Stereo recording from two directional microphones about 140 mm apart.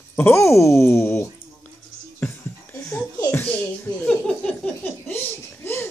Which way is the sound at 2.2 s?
15° left (ahead or behind).